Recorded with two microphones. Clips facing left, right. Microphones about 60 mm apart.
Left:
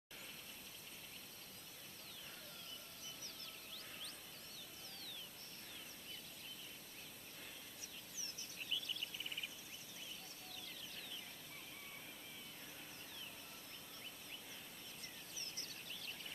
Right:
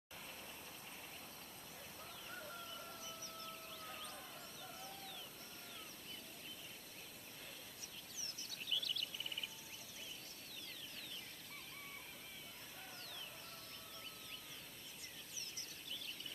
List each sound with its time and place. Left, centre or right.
8.2 s bird: left